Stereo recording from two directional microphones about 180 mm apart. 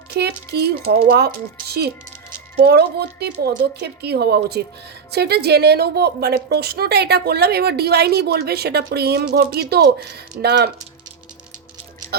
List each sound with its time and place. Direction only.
0.1 s a woman's voice: 60° right (ahead or behind)